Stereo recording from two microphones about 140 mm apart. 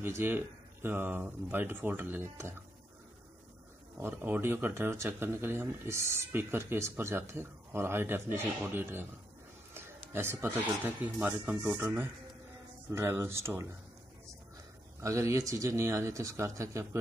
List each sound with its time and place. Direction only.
0.0 s a man's voice: 15° right (ahead or behind)
4.0 s a man's voice: 15° right (ahead or behind)
10.1 s a man's voice: 15° right (ahead or behind)
15.0 s speech: 20° right (ahead or behind)